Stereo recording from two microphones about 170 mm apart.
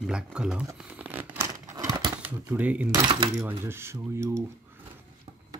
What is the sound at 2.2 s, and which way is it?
Speech, 10° right (ahead or behind).